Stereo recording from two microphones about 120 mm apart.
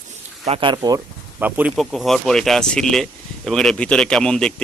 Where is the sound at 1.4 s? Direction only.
15° right (ahead or behind).